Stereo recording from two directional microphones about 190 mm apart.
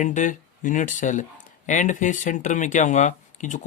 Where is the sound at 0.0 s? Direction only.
40° left (ahead or behind).